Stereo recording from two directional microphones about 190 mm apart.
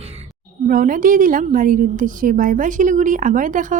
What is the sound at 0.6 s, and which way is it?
A woman's voice, 45° right (ahead or behind).